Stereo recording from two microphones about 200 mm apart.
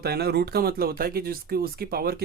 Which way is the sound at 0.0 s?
50° right (ahead or behind).